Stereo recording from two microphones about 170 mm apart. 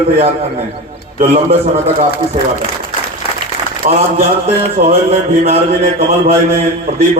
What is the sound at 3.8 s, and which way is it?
Speech, 50° right (ahead or behind).